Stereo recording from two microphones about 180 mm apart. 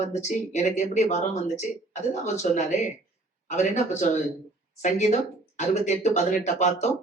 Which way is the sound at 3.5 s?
40° left (ahead or behind).